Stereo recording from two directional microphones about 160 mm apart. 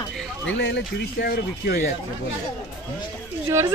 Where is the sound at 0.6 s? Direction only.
90° left.